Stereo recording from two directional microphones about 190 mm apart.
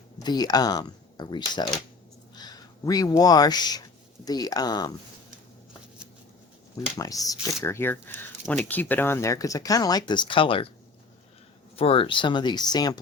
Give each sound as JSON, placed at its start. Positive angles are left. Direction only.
{"t": 0.2, "sound": "speech", "side_deg": 20}
{"t": 6.9, "sound": "speech", "side_deg": 20}
{"t": 11.8, "sound": "speech", "side_deg": 30}